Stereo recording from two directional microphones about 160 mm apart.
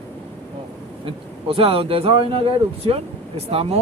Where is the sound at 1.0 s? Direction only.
35° right (ahead or behind).